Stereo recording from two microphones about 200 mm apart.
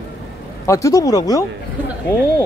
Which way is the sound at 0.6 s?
15° left (ahead or behind).